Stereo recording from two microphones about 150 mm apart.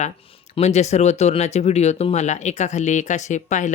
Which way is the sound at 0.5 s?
45° left (ahead or behind).